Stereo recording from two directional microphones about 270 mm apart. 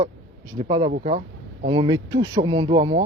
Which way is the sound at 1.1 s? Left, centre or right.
Right.